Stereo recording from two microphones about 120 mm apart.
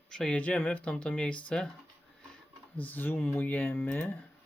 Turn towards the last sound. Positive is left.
turn(degrees=15)  # may be behind; listen again after turning